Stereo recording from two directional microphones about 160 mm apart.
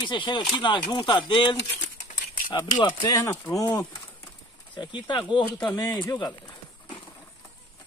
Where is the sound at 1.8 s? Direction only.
50° left (ahead or behind).